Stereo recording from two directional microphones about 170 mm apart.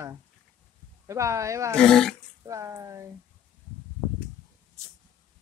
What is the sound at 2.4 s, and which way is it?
Speech, 20° right (ahead or behind).